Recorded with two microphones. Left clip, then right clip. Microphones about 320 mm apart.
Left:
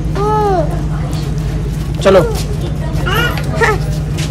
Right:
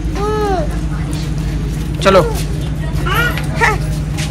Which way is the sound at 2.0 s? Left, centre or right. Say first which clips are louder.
Left 1 dB; centre.